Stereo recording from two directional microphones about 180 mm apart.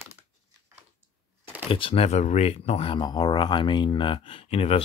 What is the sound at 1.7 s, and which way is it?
Speech, 30° left (ahead or behind).